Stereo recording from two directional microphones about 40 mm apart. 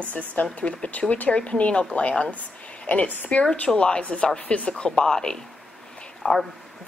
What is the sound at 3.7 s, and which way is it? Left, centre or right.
A woman's voice, left.